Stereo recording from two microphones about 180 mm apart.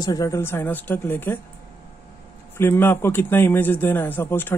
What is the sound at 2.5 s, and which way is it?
A man's voice, 10° left (ahead or behind).